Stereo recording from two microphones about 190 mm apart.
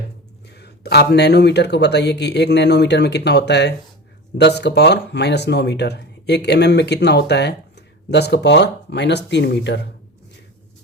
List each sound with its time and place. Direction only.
0.5 s speech: 60° left (ahead or behind)